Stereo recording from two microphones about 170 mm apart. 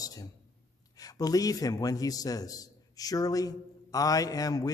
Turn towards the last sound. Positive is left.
turn(degrees=20)  # may be behind; listen again after turning